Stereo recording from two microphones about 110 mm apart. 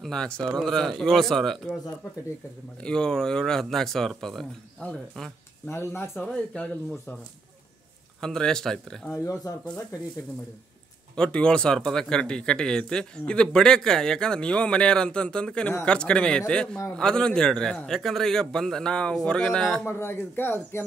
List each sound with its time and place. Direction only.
0.0 s speech: 5° left (ahead or behind)
2.8 s speech: 5° left (ahead or behind)
5.7 s speech: 20° left (ahead or behind)
6.2 s speech: 10° left (ahead or behind)
8.2 s speech: 5° left (ahead or behind)
9.1 s speech: 30° left (ahead or behind)
11.1 s speech: 10° left (ahead or behind)
19.9 s speech: 20° left (ahead or behind)